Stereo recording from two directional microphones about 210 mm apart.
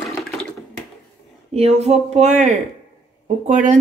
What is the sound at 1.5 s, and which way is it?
Speech, 30° right (ahead or behind).